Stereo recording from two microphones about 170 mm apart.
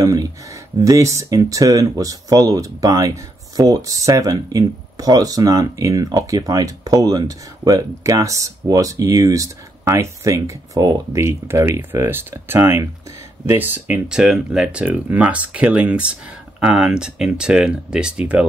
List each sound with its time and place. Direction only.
0.0 s speech: 20° right (ahead or behind)